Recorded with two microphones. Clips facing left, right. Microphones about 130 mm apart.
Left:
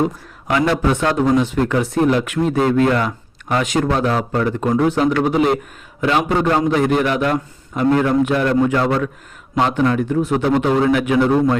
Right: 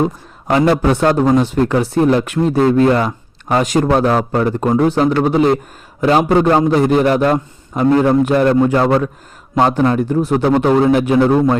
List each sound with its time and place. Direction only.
0.0 s a man's voice: 30° right (ahead or behind)